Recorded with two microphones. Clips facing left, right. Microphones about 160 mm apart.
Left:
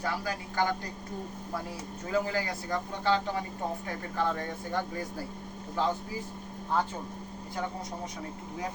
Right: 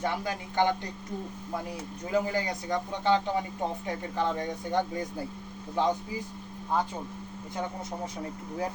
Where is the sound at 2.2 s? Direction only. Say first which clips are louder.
Right 2 dB; 20° right (ahead or behind).